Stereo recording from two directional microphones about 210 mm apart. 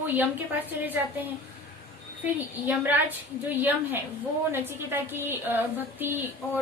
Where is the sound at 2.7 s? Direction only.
10° right (ahead or behind).